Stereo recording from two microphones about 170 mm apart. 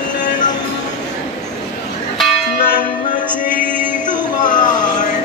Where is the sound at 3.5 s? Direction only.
10° right (ahead or behind).